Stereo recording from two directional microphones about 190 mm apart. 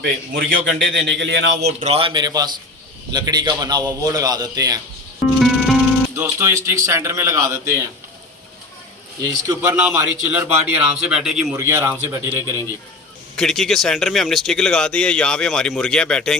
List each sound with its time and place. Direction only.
0.0 s a man's voice: 70° right (ahead or behind)
1.8 s a man's voice: 30° right (ahead or behind)
5.4 s music: centre (ahead or behind)
6.1 s a man's voice: 15° right (ahead or behind)
9.2 s a man's voice: 15° right (ahead or behind)
13.3 s speech: centre (ahead or behind)